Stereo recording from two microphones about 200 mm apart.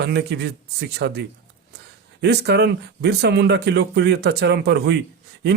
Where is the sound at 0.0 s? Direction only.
55° right (ahead or behind).